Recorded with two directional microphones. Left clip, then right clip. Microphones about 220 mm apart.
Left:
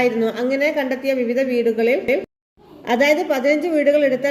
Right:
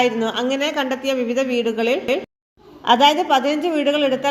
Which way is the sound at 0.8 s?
15° right (ahead or behind).